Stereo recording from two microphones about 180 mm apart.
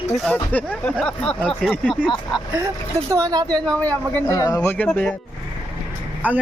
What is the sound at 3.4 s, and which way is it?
Speech, 5° left (ahead or behind).